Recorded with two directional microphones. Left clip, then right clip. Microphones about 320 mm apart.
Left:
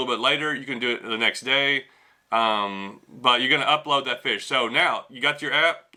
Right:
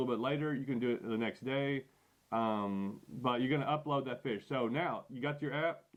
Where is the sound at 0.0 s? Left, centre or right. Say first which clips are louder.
Left 13 dB; centre.